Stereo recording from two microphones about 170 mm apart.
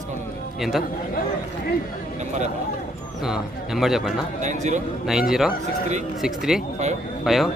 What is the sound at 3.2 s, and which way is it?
Speech, centre (ahead or behind).